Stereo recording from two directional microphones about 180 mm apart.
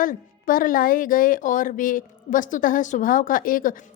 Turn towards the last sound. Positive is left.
turn(degrees=50)  # may be behind; listen again after turning